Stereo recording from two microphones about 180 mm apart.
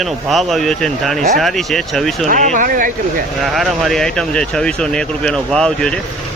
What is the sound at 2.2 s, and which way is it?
Speech, 40° right (ahead or behind).